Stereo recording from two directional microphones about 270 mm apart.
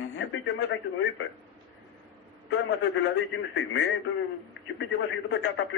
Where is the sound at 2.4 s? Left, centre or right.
Left.